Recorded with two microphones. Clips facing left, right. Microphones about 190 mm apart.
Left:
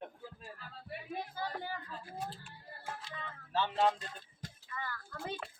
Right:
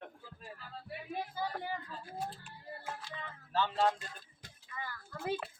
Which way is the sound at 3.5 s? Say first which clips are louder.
Right 1 dB; 20° left (ahead or behind).